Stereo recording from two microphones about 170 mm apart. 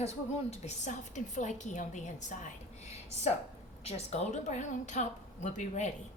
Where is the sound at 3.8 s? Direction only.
40° left (ahead or behind).